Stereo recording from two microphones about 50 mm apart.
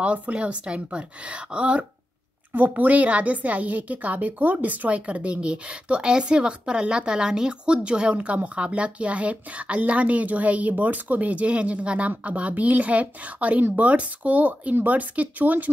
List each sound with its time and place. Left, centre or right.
0.0 s a woman's voice: right
2.5 s a woman's voice: right